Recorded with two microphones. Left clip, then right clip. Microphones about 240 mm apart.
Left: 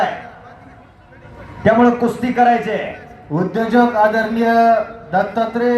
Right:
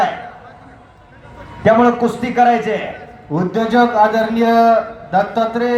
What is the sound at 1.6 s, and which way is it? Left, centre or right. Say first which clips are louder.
A man's voice: right 1 dB; right.